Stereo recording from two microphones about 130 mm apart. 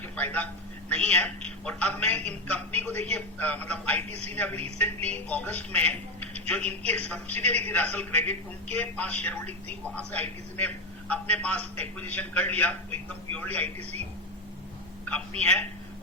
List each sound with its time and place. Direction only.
0.2 s a man's voice: 10° left (ahead or behind)
15.4 s a man's voice: 10° left (ahead or behind)